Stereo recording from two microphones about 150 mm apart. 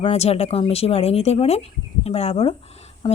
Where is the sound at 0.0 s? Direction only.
45° left (ahead or behind).